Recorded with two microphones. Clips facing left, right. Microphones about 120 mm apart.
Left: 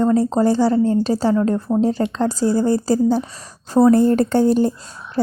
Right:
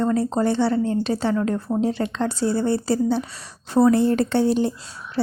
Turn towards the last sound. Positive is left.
turn(degrees=45)  # may be behind; listen again after turning